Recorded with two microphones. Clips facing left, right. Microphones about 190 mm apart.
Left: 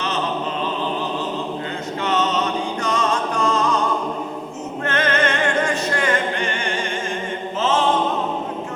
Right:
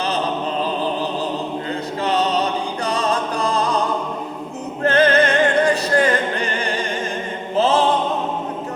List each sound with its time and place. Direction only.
2.0 s music: 35° right (ahead or behind)
4.8 s music: 35° right (ahead or behind)